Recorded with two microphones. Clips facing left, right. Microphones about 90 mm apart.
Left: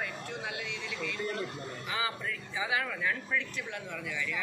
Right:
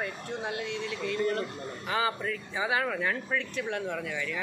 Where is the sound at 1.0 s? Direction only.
35° right (ahead or behind).